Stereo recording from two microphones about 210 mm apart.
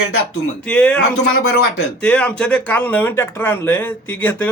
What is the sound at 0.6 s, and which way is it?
Speech, 5° left (ahead or behind).